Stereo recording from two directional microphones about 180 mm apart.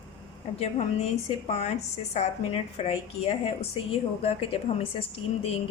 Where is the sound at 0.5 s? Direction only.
35° left (ahead or behind).